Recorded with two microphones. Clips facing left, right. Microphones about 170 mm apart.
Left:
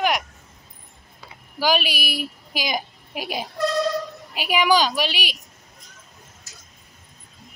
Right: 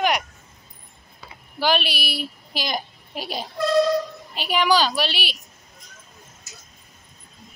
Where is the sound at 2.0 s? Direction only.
45° left (ahead or behind).